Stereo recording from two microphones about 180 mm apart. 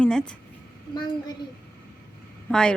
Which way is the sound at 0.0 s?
5° left (ahead or behind).